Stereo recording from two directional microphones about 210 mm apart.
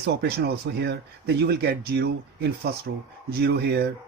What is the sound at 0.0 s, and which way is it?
Speech, 50° right (ahead or behind).